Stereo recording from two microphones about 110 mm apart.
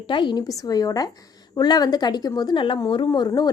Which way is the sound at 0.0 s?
45° left (ahead or behind).